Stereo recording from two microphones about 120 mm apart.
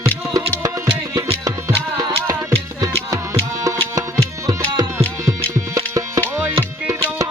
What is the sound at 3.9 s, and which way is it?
Tabla, 30° right (ahead or behind).